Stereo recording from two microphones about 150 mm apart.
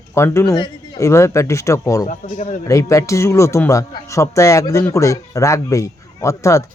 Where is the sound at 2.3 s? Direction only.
50° left (ahead or behind).